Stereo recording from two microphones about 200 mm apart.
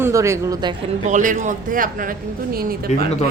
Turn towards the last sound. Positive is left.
turn(degrees=-50)  # may be behind; listen again after turning